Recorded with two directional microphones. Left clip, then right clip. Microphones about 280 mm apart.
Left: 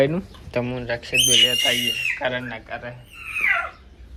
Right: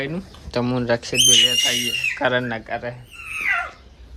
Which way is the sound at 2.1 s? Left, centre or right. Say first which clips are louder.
Right 5 dB; right.